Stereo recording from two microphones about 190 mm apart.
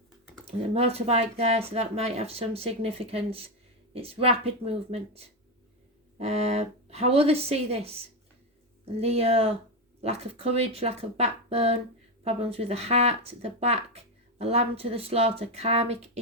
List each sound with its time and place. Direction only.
0.4 s speech: 30° right (ahead or behind)